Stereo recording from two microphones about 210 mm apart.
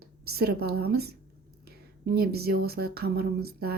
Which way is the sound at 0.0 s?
50° right (ahead or behind).